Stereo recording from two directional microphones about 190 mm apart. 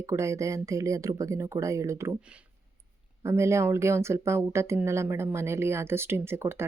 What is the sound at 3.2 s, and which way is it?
Speech, 15° right (ahead or behind).